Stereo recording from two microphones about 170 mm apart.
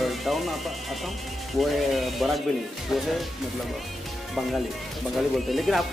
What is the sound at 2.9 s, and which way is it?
Speech, 15° left (ahead or behind).